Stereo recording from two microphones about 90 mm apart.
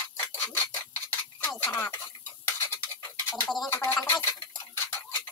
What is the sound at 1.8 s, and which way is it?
Stir, 25° left (ahead or behind).